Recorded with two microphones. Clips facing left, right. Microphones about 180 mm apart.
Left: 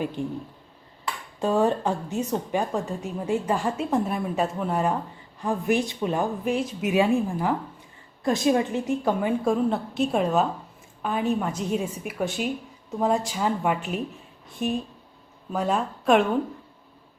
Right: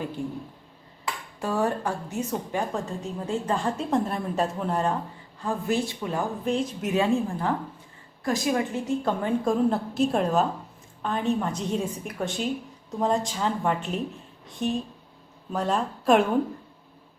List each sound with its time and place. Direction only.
0.2 s a woman's voice: 15° left (ahead or behind)
1.4 s a woman's voice: 20° left (ahead or behind)
6.4 s a woman's voice: 5° left (ahead or behind)
6.9 s a woman's voice: 15° left (ahead or behind)
8.2 s a woman's voice: 25° left (ahead or behind); by 16.2 s centre (ahead or behind)